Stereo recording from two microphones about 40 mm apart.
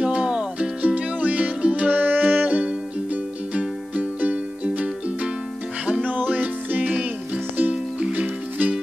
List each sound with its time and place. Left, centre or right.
0.0 s music: right
0.8 s music: right
8.1 s music: right